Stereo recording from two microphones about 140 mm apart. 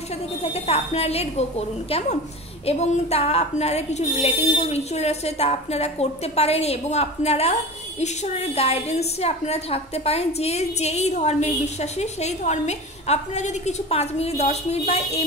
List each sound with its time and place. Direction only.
0.4 s a woman's voice: 45° left (ahead or behind)